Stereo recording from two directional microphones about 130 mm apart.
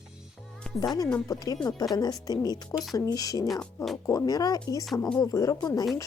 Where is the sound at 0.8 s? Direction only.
30° left (ahead or behind).